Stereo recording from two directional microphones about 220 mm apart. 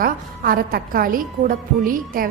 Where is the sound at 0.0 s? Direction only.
40° right (ahead or behind).